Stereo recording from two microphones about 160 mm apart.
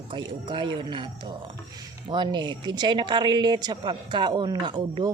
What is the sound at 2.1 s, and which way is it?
A woman's voice, 30° right (ahead or behind).